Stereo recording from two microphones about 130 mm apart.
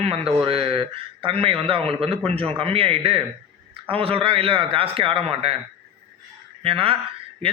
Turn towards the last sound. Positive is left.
turn(degrees=-45)  # may be behind; listen again after turning